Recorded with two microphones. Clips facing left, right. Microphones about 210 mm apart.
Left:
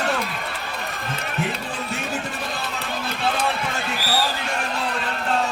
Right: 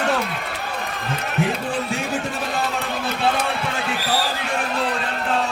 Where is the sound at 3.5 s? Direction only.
60° right (ahead or behind).